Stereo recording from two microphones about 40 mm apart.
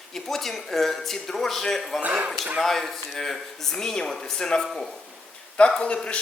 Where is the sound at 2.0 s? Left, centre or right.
Right.